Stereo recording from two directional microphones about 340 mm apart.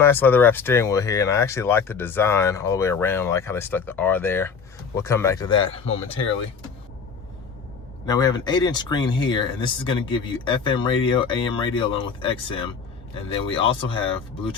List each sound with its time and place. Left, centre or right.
0.0 s speech: centre
8.0 s speech: centre